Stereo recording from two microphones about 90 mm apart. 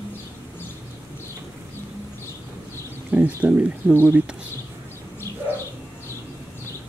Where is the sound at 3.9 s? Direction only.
25° right (ahead or behind).